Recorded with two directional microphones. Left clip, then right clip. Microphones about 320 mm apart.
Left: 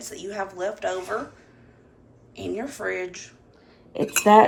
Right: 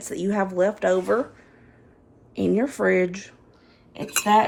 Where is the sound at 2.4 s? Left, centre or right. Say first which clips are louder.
Right 8 dB; centre.